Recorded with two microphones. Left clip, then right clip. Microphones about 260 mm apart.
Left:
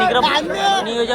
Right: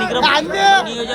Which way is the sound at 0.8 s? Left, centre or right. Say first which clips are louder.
Left 4 dB; centre.